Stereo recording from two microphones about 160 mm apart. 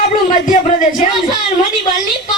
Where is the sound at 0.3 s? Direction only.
55° left (ahead or behind).